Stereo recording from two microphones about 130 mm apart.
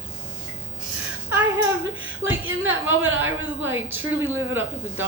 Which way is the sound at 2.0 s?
15° right (ahead or behind).